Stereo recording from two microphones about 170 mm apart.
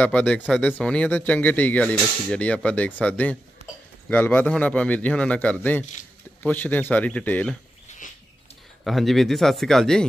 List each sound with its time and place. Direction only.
0.0 s speech: 10° left (ahead or behind)
8.0 s rodents: 50° left (ahead or behind)
8.8 s speech: centre (ahead or behind)